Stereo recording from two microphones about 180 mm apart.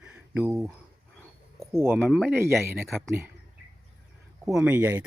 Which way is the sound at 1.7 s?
15° right (ahead or behind).